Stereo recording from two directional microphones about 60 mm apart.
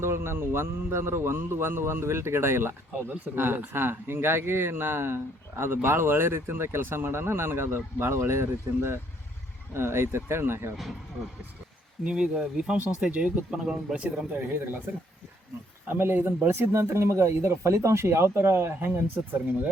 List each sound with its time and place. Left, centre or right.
0.0 s a man's voice: right
12.0 s speech: centre
14.3 s speech: right
15.9 s speech: right
16.7 s a man's voice: right